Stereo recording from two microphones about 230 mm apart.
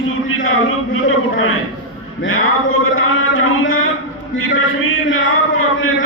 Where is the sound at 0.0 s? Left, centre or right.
Left.